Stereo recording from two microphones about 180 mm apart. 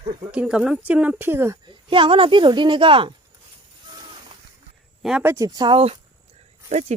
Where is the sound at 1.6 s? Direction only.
25° right (ahead or behind).